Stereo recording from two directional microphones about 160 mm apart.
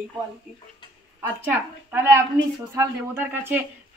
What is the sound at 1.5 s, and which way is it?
Speech, 15° right (ahead or behind).